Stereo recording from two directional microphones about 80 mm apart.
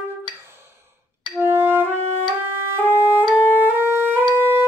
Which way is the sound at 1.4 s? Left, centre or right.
Right.